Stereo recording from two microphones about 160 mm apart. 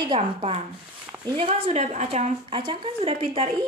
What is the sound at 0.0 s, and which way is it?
A woman's voice, 30° right (ahead or behind).